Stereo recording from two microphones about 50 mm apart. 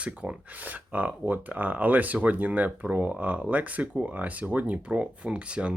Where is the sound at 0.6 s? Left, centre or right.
Right.